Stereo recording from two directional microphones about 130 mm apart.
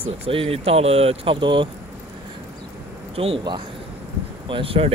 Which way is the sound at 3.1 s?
45° right (ahead or behind).